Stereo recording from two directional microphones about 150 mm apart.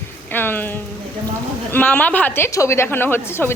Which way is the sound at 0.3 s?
15° left (ahead or behind).